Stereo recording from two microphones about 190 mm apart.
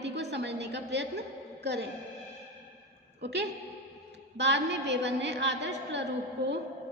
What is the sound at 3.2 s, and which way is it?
A woman's voice, 65° right (ahead or behind).